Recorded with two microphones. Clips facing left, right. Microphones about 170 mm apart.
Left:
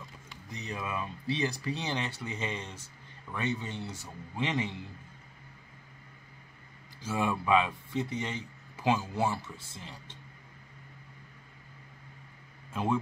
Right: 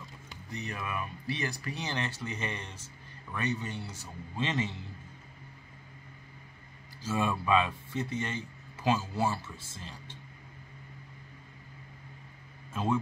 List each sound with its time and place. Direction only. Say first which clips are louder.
0.5 s speech: left 1 dB; 20° left (ahead or behind)
7.0 s speech: even; 15° left (ahead or behind)
12.7 s speech: even; 15° left (ahead or behind)